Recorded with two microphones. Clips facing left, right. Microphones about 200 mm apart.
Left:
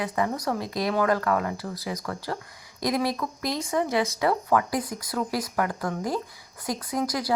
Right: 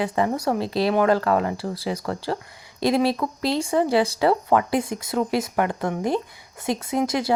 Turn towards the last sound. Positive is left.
turn(degrees=-25)  # may be behind; listen again after turning